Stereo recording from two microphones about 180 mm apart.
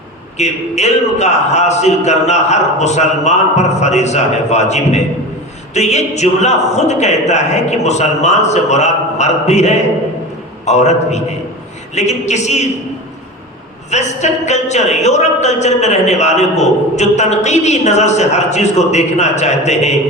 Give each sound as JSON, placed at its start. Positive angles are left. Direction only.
{"t": 0.3, "sound": "a woman's voice", "side_deg": 40}
{"t": 13.9, "sound": "a woman's voice", "side_deg": 40}